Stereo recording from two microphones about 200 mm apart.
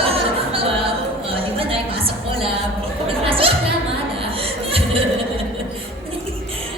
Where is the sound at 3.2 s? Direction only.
25° right (ahead or behind).